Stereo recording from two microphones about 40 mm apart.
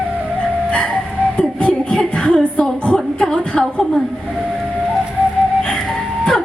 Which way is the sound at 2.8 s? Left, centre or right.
Left.